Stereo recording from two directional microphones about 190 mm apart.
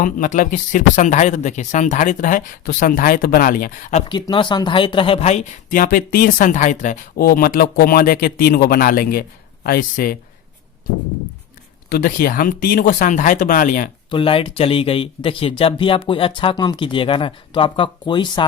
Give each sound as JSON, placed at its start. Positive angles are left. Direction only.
{"t": 0.0, "sound": "speech", "side_deg": 45}
{"t": 4.1, "sound": "speech", "side_deg": 25}
{"t": 11.9, "sound": "speech", "side_deg": 50}
{"t": 14.1, "sound": "speech", "side_deg": 30}